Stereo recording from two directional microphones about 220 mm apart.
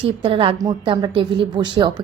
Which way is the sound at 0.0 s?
25° right (ahead or behind).